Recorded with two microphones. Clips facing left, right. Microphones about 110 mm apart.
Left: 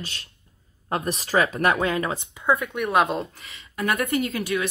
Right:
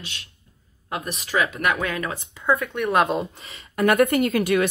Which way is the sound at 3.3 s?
30° right (ahead or behind).